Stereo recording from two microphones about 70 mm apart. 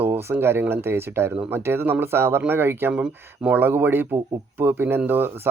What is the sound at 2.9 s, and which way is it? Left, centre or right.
Speech, centre.